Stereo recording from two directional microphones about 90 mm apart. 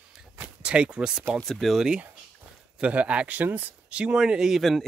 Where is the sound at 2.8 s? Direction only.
15° right (ahead or behind).